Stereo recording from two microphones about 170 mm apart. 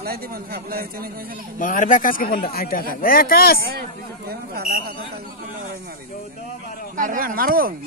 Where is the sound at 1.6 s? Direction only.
50° left (ahead or behind).